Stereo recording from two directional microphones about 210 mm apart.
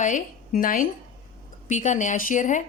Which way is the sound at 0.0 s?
40° left (ahead or behind).